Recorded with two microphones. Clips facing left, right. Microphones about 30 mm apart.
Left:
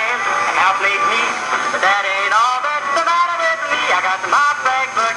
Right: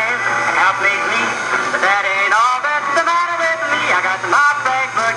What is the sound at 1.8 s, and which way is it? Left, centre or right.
Music, centre.